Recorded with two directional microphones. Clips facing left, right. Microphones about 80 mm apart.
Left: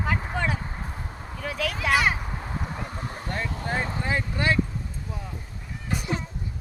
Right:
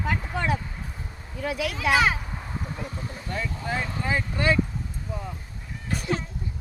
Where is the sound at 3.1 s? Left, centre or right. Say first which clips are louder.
Left 1 dB; left.